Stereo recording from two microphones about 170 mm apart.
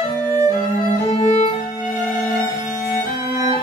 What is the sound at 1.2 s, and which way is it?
Music, 40° left (ahead or behind).